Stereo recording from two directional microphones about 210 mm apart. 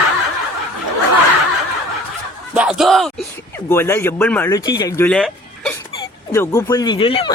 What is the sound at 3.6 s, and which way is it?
Speech, 10° left (ahead or behind).